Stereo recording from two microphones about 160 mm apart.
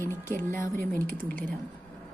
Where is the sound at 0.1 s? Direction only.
15° left (ahead or behind).